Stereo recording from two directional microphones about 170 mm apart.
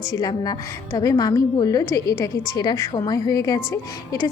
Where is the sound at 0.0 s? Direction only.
20° left (ahead or behind).